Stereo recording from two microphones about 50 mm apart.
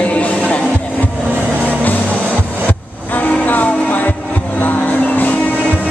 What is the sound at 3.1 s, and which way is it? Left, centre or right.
Music, left.